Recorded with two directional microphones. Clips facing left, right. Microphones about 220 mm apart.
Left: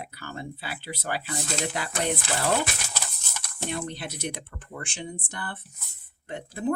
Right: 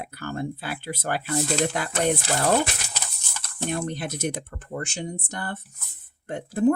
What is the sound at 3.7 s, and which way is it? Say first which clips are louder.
Speech: right 4 dB; 50° right (ahead or behind).